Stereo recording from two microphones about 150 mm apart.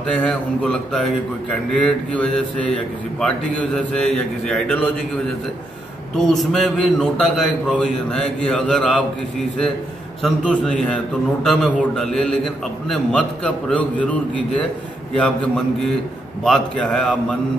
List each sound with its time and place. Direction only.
0.1 s a man's voice: 5° left (ahead or behind)
6.1 s a man's voice: centre (ahead or behind)
10.2 s a man's voice: 5° left (ahead or behind)